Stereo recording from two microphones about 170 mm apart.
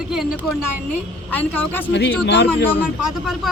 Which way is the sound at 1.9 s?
90° left.